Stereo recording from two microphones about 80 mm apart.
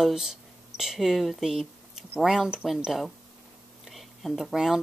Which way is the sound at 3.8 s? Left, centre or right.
Centre.